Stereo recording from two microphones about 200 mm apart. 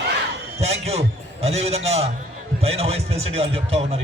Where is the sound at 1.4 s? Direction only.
30° right (ahead or behind).